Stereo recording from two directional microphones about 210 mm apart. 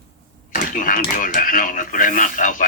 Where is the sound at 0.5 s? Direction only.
40° left (ahead or behind).